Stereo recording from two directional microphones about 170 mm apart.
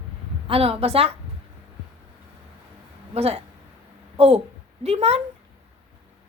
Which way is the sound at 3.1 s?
35° right (ahead or behind).